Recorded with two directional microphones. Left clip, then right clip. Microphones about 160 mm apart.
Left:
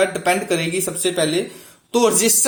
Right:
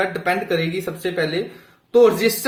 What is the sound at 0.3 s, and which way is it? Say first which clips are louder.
Speech: left 2 dB; 30° left (ahead or behind).